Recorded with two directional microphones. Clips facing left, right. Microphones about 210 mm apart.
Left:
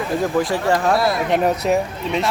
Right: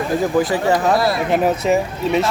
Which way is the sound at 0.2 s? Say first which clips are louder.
Right 2 dB; centre (ahead or behind).